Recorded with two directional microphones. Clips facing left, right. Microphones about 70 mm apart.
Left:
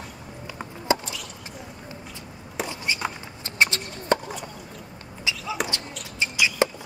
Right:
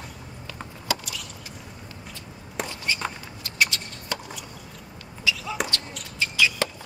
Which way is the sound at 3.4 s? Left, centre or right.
Left.